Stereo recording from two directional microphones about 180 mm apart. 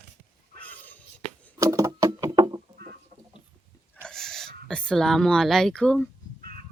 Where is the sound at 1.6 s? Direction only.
20° right (ahead or behind).